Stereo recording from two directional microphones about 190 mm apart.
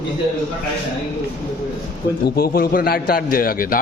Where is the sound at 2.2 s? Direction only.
55° left (ahead or behind).